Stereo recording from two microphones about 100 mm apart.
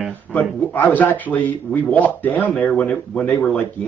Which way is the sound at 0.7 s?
15° left (ahead or behind).